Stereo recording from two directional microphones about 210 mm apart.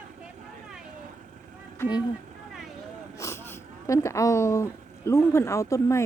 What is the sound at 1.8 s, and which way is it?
Speech, 20° left (ahead or behind).